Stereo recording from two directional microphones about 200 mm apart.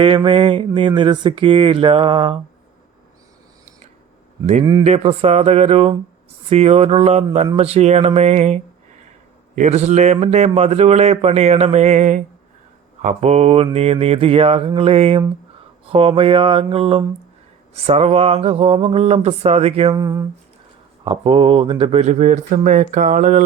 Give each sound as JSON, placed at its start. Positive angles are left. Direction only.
{"t": 0.0, "sound": "speech", "side_deg": -25}
{"t": 4.8, "sound": "speech", "side_deg": -30}
{"t": 19.9, "sound": "speech", "side_deg": -15}
{"t": 21.0, "sound": "speech", "side_deg": -25}